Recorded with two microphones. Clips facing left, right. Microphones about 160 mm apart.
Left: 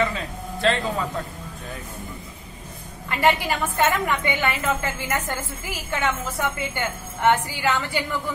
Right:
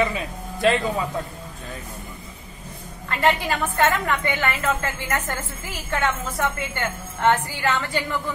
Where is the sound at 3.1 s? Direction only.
15° left (ahead or behind).